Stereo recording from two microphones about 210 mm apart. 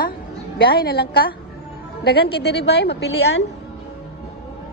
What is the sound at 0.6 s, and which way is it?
Speech, 45° left (ahead or behind).